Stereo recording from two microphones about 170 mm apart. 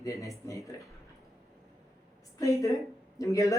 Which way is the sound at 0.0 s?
20° left (ahead or behind).